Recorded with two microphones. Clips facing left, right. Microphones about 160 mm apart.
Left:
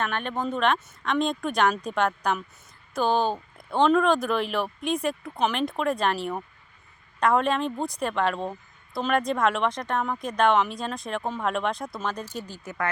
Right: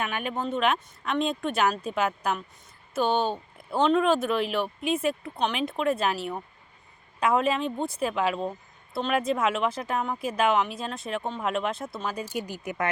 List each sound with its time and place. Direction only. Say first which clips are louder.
0.0 s speech: left 1 dB; 10° right (ahead or behind)